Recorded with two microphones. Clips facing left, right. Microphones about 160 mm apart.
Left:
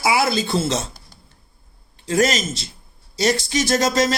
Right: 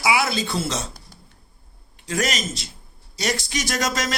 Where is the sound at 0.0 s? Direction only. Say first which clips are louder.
Left 3 dB; 35° left (ahead or behind).